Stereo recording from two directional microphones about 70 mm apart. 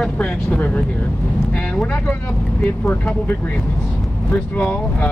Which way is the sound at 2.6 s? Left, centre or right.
Left.